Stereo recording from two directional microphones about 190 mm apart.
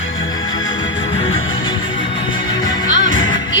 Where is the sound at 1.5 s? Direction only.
25° left (ahead or behind).